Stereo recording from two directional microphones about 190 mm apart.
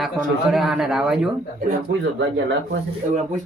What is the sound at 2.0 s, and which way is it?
Speech, 65° right (ahead or behind).